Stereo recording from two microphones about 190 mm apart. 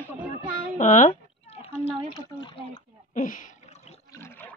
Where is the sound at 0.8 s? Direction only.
40° left (ahead or behind).